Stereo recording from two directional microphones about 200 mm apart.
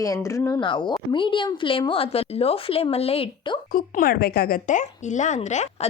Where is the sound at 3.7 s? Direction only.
45° left (ahead or behind).